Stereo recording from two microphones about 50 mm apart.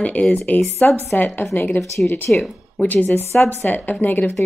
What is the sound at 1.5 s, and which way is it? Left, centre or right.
Speech, left.